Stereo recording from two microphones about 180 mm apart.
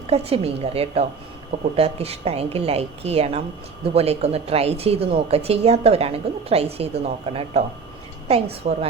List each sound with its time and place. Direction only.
0.1 s speech: 35° right (ahead or behind)